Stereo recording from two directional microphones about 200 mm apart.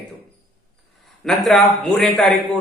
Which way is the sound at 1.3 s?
Centre (ahead or behind).